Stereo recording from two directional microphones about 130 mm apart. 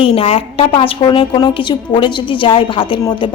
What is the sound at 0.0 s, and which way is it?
A woman's voice, 45° left (ahead or behind).